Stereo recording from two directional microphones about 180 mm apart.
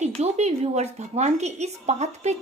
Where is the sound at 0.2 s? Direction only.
35° right (ahead or behind).